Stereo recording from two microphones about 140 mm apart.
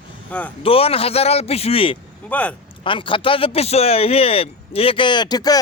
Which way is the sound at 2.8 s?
35° left (ahead or behind).